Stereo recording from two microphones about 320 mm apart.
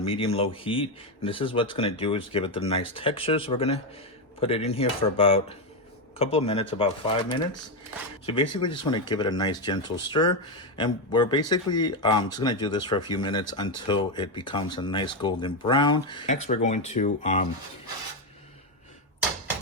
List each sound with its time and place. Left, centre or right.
0.0 s a man's voice: centre